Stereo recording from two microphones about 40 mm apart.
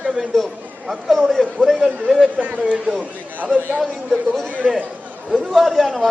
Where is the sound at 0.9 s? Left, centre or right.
Centre.